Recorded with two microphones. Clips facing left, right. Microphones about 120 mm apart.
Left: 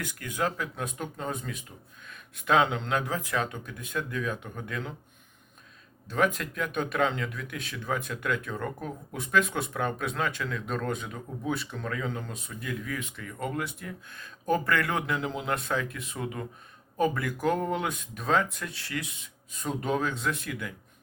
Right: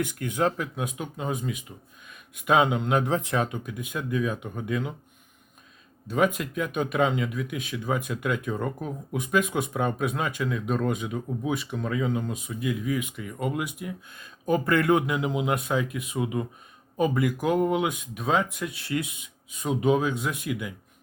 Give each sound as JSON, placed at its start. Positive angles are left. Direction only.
{"t": 0.0, "sound": "speech", "side_deg": -20}
{"t": 0.8, "sound": "speech", "side_deg": -10}
{"t": 6.1, "sound": "speech", "side_deg": -15}
{"t": 19.5, "sound": "speech", "side_deg": -5}